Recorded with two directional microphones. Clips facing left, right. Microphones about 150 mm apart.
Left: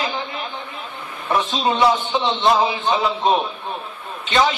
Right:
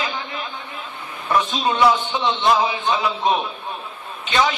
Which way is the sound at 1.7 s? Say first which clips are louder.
Left 1 dB; 25° left (ahead or behind).